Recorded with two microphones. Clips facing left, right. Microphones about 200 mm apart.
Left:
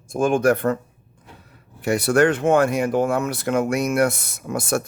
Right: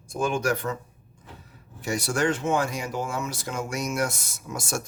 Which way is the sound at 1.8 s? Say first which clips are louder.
Left 9 dB; 60° left (ahead or behind).